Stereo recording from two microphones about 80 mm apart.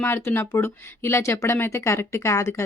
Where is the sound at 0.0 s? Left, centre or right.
Left.